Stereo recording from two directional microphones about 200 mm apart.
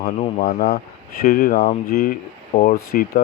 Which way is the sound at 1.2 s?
45° left (ahead or behind).